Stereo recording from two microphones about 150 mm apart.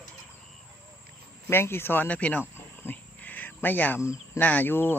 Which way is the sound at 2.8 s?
10° left (ahead or behind).